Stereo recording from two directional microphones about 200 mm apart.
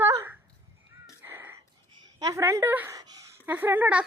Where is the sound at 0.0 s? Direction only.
15° right (ahead or behind).